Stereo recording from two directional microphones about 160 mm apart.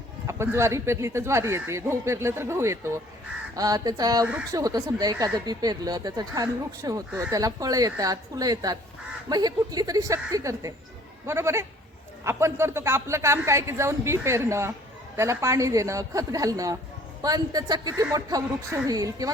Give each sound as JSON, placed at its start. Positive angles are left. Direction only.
{"t": 0.3, "sound": "speech", "side_deg": -15}